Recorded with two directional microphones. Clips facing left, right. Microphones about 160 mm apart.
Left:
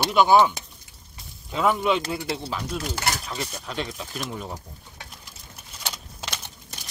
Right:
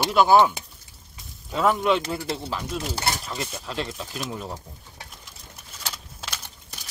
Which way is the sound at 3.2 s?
5° right (ahead or behind).